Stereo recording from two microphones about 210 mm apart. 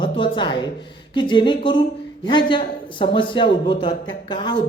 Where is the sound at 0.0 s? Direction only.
20° left (ahead or behind).